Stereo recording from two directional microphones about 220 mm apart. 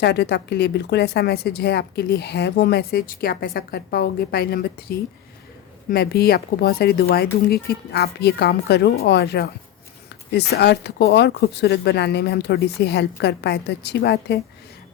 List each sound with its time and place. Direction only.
0.0 s a woman's voice: 50° left (ahead or behind)